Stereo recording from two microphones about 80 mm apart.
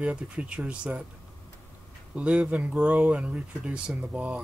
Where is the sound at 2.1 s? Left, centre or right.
Centre.